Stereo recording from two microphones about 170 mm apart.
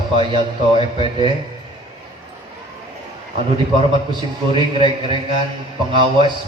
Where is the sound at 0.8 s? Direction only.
30° right (ahead or behind).